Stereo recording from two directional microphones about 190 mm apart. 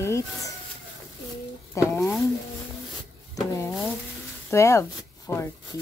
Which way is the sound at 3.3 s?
15° left (ahead or behind).